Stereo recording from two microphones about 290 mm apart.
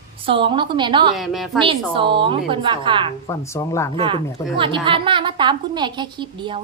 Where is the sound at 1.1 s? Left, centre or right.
Centre.